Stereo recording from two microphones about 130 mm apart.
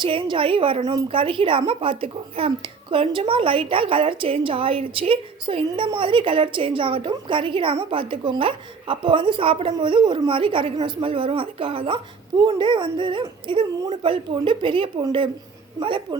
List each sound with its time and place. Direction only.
0.0 s speech: 40° right (ahead or behind)